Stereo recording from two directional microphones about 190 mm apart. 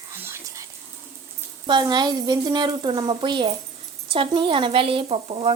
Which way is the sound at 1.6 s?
25° right (ahead or behind).